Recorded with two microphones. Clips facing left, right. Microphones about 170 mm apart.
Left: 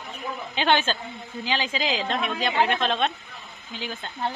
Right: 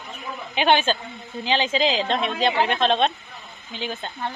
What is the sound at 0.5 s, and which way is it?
A woman's voice, 15° right (ahead or behind).